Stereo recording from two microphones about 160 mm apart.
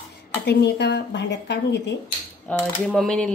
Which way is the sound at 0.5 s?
90° left.